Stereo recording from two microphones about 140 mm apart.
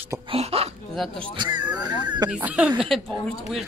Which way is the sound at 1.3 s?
30° right (ahead or behind).